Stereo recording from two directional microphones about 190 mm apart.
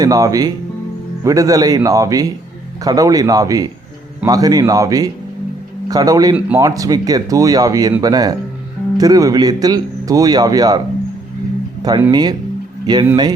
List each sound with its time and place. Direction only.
0.0 s speech: 20° right (ahead or behind)
12.1 s speech: 20° right (ahead or behind)